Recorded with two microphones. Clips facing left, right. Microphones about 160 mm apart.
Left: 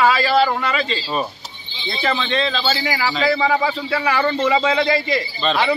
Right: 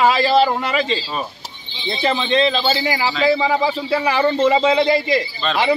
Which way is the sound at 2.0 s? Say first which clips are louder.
Right 4 dB; 20° right (ahead or behind).